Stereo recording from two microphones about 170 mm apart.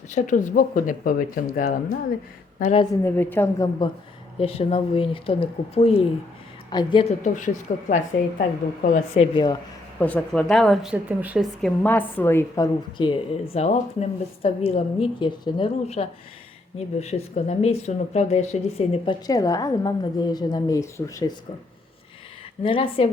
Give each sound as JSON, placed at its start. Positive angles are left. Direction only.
{"t": 0.1, "sound": "speech", "side_deg": 50}
{"t": 2.9, "sound": "a woman's voice", "side_deg": 15}
{"t": 4.4, "sound": "a woman's voice", "side_deg": 35}
{"t": 7.2, "sound": "speech", "side_deg": 50}
{"t": 9.1, "sound": "a woman's voice", "side_deg": 25}
{"t": 10.0, "sound": "speech", "side_deg": 10}
{"t": 11.6, "sound": "a woman's voice", "side_deg": 10}
{"t": 19.0, "sound": "a woman's voice", "side_deg": 20}
{"t": 22.6, "sound": "speech", "side_deg": 30}